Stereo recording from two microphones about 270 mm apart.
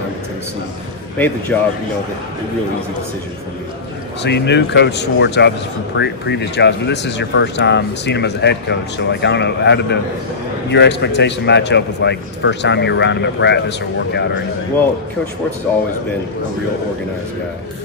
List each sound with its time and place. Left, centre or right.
1.1 s speech: centre
4.2 s speech: left